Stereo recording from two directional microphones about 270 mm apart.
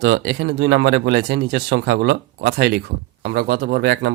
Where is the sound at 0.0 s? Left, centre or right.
Right.